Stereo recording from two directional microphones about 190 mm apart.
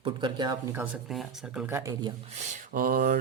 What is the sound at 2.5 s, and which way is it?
Speech, 45° right (ahead or behind).